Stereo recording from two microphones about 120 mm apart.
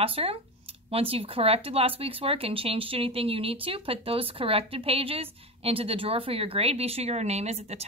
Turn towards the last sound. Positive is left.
turn(degrees=-60)  # may be behind; listen again after turning